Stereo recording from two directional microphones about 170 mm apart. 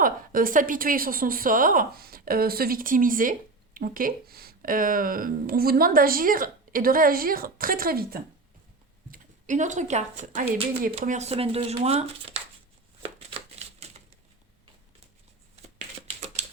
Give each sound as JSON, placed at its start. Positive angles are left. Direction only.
{"t": 0.0, "sound": "speech", "side_deg": -55}
{"t": 9.1, "sound": "a woman's voice", "side_deg": -45}
{"t": 13.7, "sound": "typewriter", "side_deg": -40}